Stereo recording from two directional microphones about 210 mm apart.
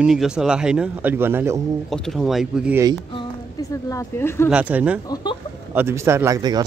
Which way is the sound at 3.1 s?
15° left (ahead or behind).